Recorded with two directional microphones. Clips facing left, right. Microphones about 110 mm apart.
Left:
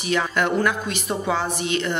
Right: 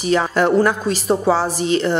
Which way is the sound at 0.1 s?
35° right (ahead or behind).